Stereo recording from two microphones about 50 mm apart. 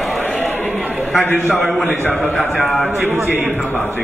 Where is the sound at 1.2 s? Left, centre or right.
Left.